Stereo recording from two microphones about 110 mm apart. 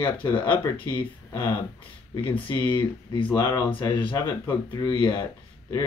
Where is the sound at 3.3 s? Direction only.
25° left (ahead or behind).